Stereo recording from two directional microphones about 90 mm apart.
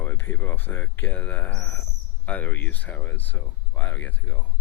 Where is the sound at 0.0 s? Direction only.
25° left (ahead or behind).